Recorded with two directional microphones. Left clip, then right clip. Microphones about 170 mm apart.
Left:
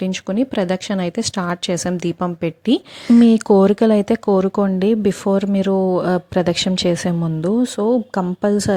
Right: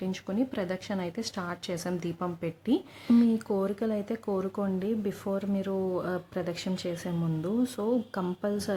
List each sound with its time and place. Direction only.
0.0 s speech: 45° left (ahead or behind)